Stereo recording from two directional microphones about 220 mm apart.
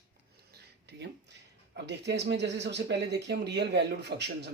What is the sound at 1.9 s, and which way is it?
Speech, 50° right (ahead or behind).